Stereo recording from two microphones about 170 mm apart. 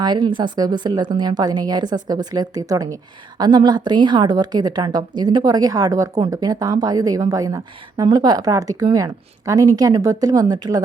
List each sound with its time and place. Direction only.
0.0 s a woman's voice: 25° right (ahead or behind)